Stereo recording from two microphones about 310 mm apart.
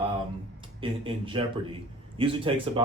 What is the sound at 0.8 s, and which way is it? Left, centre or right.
Speech, centre.